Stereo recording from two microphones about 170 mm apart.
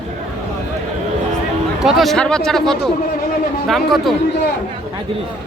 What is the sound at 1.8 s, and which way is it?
A man's voice, centre (ahead or behind).